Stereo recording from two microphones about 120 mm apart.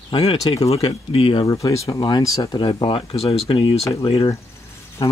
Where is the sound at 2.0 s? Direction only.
35° left (ahead or behind).